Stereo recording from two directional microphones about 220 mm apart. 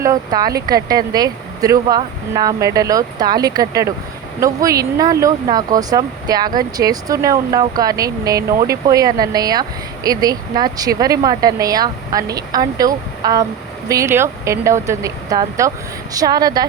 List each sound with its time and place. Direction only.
0.0 s speech: 15° right (ahead or behind)